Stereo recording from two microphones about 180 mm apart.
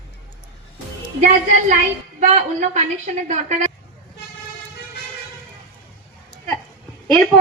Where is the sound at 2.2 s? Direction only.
40° right (ahead or behind).